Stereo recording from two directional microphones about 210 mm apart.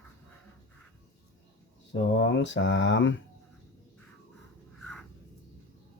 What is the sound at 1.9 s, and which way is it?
Mantra, 60° left (ahead or behind).